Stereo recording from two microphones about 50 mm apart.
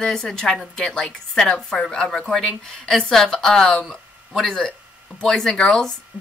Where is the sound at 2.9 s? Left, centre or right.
Centre.